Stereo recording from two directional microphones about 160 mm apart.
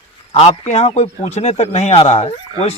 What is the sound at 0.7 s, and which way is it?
Speech, 45° left (ahead or behind).